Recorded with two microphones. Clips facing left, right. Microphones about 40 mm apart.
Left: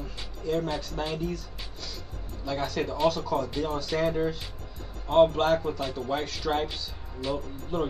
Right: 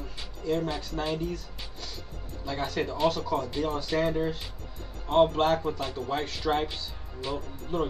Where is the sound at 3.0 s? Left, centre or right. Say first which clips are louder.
Left 1 dB; centre.